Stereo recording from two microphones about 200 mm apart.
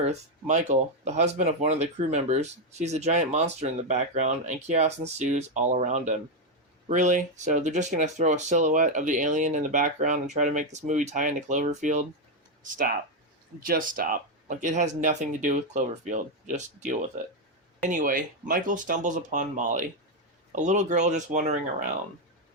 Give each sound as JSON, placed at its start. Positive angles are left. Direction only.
{"t": 0.0, "sound": "speech", "side_deg": -35}